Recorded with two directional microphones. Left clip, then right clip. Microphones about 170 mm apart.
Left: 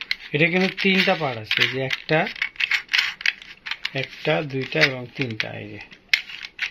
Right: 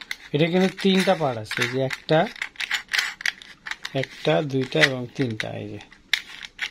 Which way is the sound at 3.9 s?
50° right (ahead or behind).